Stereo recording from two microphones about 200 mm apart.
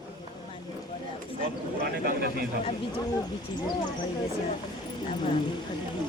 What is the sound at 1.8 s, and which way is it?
Speech, 50° right (ahead or behind).